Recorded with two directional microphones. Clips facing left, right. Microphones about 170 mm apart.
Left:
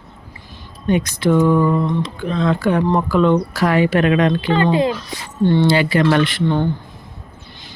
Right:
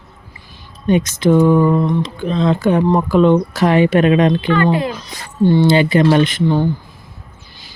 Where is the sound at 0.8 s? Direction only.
20° right (ahead or behind).